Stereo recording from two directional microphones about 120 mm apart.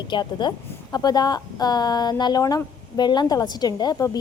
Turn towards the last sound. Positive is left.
turn(degrees=35)  # may be behind; listen again after turning